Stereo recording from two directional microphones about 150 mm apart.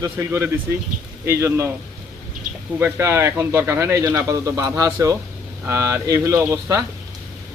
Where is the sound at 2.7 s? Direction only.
15° right (ahead or behind).